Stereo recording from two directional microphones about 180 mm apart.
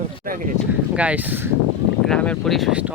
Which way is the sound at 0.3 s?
50° right (ahead or behind).